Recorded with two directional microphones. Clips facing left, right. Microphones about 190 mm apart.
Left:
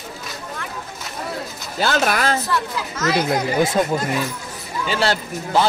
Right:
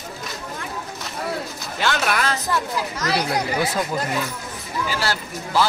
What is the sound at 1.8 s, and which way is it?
Speech, 40° left (ahead or behind).